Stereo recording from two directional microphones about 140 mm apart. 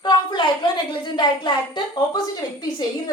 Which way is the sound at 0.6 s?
35° left (ahead or behind).